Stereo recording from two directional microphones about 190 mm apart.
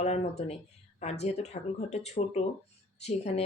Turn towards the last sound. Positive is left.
turn(degrees=35)  # may be behind; listen again after turning